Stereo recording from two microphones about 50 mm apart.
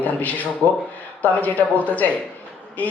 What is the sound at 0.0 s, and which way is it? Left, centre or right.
Speech, left.